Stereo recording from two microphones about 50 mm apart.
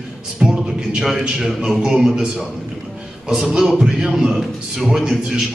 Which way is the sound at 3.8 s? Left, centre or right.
Centre.